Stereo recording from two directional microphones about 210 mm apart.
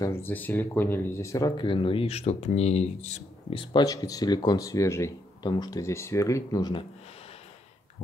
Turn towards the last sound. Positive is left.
turn(degrees=30)  # may be behind; listen again after turning